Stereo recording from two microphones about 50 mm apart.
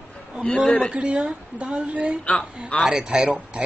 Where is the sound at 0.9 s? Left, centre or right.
Right.